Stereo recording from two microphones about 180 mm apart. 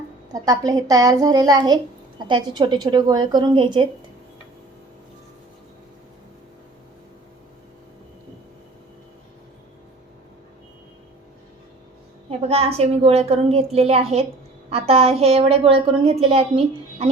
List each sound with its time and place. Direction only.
0.3 s a woman's voice: 20° right (ahead or behind)
12.4 s a woman's voice: 35° right (ahead or behind)